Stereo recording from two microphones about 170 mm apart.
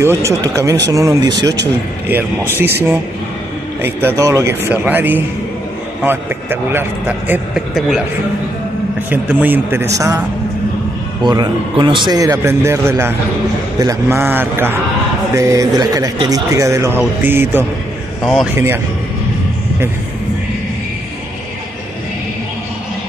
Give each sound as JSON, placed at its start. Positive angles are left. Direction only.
{"t": 0.0, "sound": "a man's voice", "side_deg": -15}
{"t": 3.8, "sound": "a man's voice", "side_deg": -15}
{"t": 9.1, "sound": "a man's voice", "side_deg": -10}
{"t": 11.2, "sound": "a man's voice", "side_deg": -25}
{"t": 18.2, "sound": "speech", "side_deg": 0}
{"t": 18.5, "sound": "a man's voice", "side_deg": -15}